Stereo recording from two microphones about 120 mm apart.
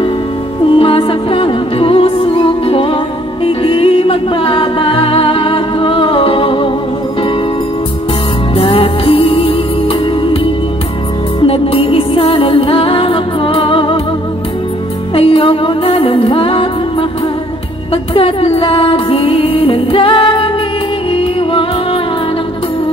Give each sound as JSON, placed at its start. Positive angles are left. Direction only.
{"t": 0.7, "sound": "music", "side_deg": 50}
{"t": 8.5, "sound": "music", "side_deg": 50}
{"t": 15.1, "sound": "music", "side_deg": 50}
{"t": 18.1, "sound": "music", "side_deg": 50}